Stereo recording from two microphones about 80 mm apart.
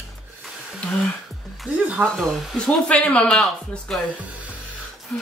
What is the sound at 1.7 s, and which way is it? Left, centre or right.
Speech, centre.